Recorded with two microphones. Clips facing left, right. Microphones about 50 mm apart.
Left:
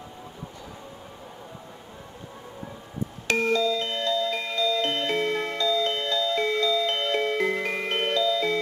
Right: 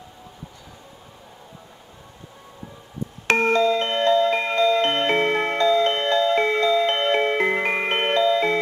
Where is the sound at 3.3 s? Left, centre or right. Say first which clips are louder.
Right 5 dB; right.